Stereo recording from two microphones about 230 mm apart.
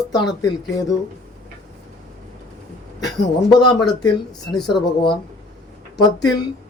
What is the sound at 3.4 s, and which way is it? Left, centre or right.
A man's voice, centre.